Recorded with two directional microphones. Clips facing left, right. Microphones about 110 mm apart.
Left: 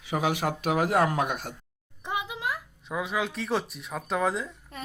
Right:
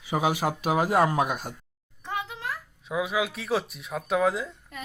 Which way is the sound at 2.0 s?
15° left (ahead or behind).